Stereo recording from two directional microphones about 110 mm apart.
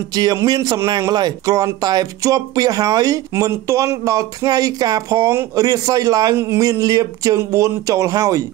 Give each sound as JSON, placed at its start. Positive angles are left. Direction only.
{"t": 0.1, "sound": "speech", "side_deg": -35}